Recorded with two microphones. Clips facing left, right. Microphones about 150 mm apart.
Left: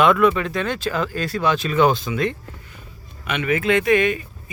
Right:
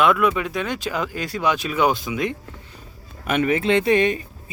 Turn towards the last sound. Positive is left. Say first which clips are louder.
# even
turn(degrees=-30)  # may be behind; listen again after turning